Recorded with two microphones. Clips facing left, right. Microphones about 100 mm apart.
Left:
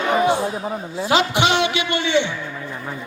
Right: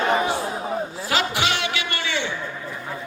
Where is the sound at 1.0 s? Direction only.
20° left (ahead or behind).